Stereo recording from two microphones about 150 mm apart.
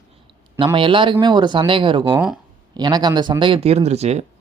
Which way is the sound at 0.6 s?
35° right (ahead or behind).